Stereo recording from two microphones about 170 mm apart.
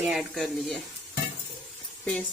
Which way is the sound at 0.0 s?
Centre (ahead or behind).